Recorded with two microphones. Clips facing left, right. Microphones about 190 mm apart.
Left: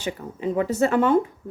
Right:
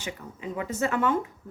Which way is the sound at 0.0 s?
35° left (ahead or behind).